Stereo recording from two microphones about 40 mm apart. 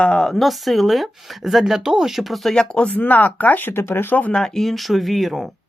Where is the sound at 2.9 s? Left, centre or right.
Left.